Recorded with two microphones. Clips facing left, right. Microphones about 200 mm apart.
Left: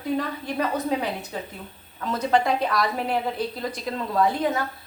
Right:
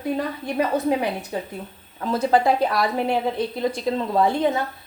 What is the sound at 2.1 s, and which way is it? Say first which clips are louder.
A woman's voice: right 3 dB; 30° right (ahead or behind).